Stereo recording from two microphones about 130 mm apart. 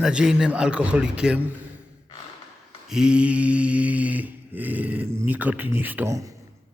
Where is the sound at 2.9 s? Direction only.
5° right (ahead or behind).